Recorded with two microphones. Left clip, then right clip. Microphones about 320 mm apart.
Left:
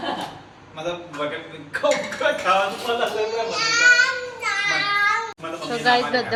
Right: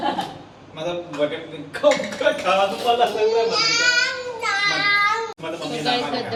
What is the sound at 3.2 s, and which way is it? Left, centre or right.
Speech, centre.